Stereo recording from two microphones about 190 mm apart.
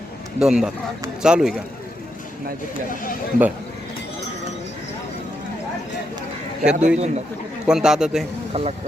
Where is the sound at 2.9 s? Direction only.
45° left (ahead or behind).